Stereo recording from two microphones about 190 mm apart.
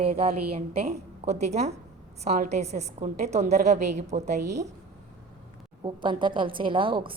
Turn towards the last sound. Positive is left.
turn(degrees=-25)  # may be behind; listen again after turning